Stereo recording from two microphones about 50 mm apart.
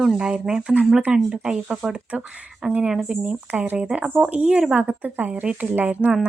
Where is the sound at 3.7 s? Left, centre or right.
Right.